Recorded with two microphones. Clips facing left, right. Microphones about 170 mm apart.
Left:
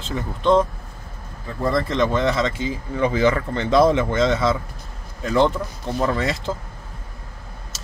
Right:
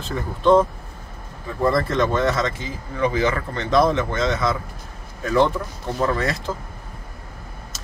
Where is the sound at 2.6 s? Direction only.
25° left (ahead or behind).